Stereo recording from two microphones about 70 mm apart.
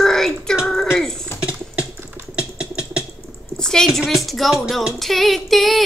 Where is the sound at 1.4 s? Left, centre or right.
Centre.